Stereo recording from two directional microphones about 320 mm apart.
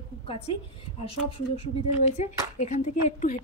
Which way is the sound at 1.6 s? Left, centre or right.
Centre.